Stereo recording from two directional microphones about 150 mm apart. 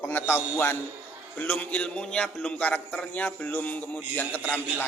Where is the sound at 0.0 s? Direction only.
15° left (ahead or behind).